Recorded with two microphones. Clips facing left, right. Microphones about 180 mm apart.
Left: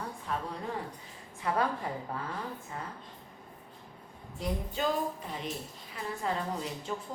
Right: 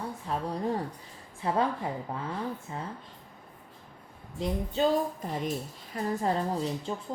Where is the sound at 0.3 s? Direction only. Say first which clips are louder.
Right 6 dB; 35° right (ahead or behind).